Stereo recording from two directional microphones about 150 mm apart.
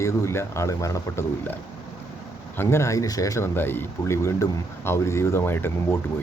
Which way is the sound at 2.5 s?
15° left (ahead or behind).